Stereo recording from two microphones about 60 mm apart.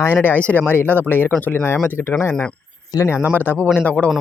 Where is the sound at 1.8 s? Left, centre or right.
Left.